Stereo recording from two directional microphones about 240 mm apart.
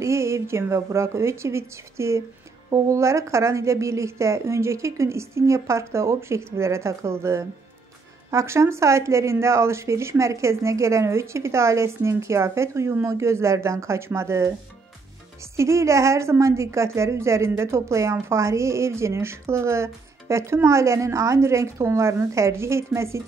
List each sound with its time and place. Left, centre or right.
0.0 s a woman's voice: centre
15.5 s a woman's voice: centre